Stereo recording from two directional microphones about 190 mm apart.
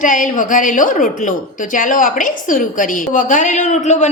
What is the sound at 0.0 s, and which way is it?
A woman's voice, 45° left (ahead or behind).